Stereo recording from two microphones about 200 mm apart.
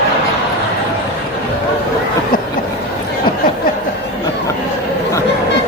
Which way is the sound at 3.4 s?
45° left (ahead or behind).